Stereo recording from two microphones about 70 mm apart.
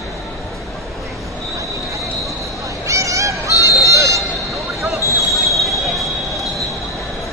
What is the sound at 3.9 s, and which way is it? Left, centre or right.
Vehicle, right.